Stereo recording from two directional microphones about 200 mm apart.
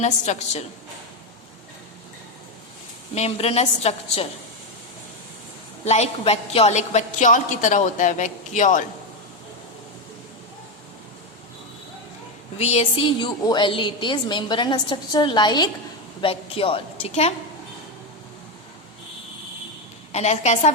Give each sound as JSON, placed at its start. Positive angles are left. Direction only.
{"t": 0.0, "sound": "a woman's voice", "side_deg": 35}
{"t": 3.2, "sound": "a woman's voice", "side_deg": 30}
{"t": 5.8, "sound": "a woman's voice", "side_deg": 35}
{"t": 12.5, "sound": "a woman's voice", "side_deg": 35}
{"t": 20.1, "sound": "a woman's voice", "side_deg": 35}